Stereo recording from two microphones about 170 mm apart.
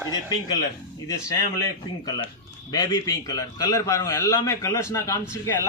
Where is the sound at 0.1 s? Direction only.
25° left (ahead or behind).